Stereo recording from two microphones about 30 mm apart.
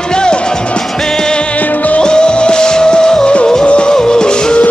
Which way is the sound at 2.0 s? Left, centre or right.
Left.